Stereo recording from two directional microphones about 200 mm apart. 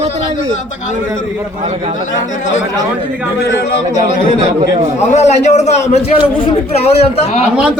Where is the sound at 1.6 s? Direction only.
30° right (ahead or behind).